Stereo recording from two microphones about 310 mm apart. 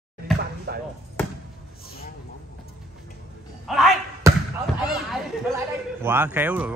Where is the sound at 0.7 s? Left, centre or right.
Right.